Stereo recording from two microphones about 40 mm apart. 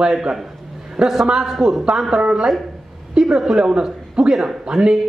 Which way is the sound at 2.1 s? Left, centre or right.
Centre.